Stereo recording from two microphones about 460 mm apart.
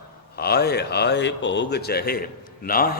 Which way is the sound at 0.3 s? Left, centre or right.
Left.